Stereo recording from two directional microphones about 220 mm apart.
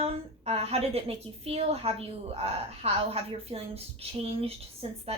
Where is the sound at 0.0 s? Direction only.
30° right (ahead or behind).